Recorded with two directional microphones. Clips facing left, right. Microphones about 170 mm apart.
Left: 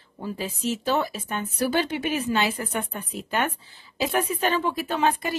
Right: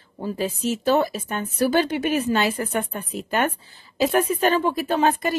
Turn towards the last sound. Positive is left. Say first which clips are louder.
# right 4 dB
turn(degrees=-45)  # may be behind; listen again after turning